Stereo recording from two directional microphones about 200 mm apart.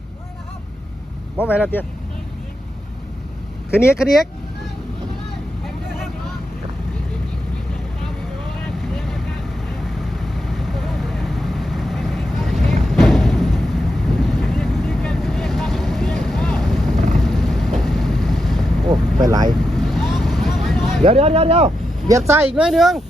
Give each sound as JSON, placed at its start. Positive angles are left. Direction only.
{"t": 1.4, "sound": "speech", "side_deg": 10}
{"t": 3.7, "sound": "speech", "side_deg": 10}
{"t": 8.8, "sound": "vehicle", "side_deg": 0}
{"t": 21.0, "sound": "speech", "side_deg": -30}
{"t": 22.3, "sound": "speech", "side_deg": -10}